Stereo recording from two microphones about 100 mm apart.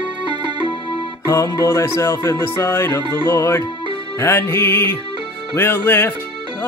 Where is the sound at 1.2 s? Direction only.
40° left (ahead or behind).